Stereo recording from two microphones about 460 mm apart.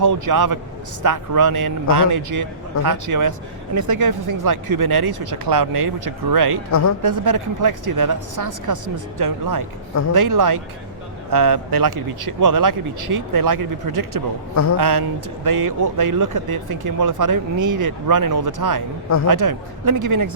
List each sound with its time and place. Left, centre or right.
0.0 s speech: right
6.7 s speech: left
7.0 s speech: right
14.5 s speech: left
14.8 s speech: right